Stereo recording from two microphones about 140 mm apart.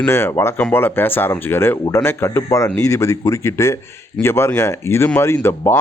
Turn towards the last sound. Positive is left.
turn(degrees=15)  # may be behind; listen again after turning